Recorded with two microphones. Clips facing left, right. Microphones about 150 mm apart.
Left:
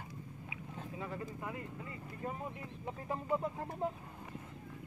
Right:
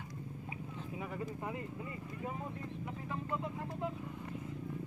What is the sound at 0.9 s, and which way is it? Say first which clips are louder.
Speech: right 1 dB; 15° right (ahead or behind).